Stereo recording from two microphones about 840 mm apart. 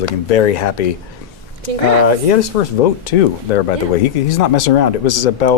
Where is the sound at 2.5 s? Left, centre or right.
Left.